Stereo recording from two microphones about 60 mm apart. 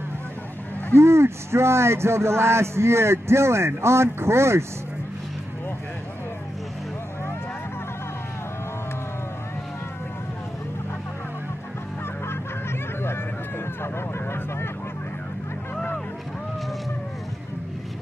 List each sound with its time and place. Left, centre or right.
0.9 s speech: right
13.9 s vehicle: left
15.7 s a sound: left